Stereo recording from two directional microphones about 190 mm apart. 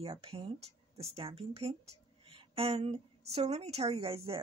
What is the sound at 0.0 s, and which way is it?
A woman's voice, 30° right (ahead or behind).